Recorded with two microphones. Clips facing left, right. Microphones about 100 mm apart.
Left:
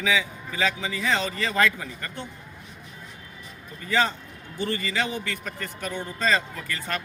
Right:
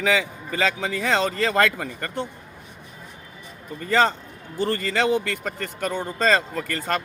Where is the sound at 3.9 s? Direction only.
80° right.